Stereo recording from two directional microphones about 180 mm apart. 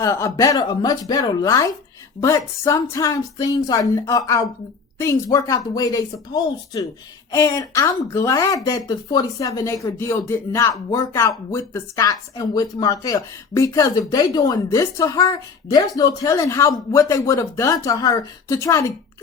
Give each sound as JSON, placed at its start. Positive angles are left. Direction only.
{"t": 0.0, "sound": "speech", "side_deg": 15}